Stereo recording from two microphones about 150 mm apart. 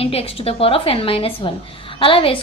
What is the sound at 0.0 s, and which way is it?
A woman's voice, 40° left (ahead or behind).